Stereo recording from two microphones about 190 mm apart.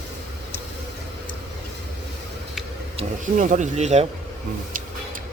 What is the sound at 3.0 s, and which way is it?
Speech, 40° right (ahead or behind).